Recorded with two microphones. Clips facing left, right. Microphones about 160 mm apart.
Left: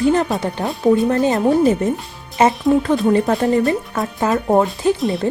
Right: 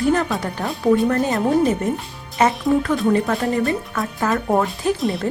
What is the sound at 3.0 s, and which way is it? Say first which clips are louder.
Speech: left 3 dB; 25° left (ahead or behind).